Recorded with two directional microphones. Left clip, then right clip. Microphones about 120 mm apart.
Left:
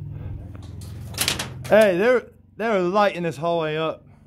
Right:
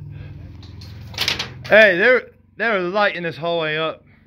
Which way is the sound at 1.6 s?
10° left (ahead or behind).